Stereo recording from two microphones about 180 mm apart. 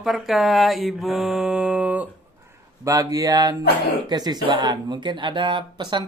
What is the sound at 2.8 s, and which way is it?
Speech, 20° right (ahead or behind).